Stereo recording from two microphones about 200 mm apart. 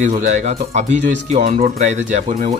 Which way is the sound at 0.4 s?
35° right (ahead or behind).